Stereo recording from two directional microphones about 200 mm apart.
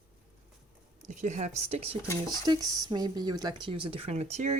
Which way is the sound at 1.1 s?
35° right (ahead or behind).